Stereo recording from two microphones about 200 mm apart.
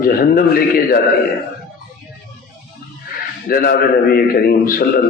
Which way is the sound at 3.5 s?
45° left (ahead or behind).